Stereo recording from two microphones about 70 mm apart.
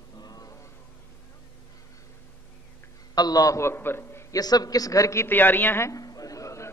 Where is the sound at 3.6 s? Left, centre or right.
Left.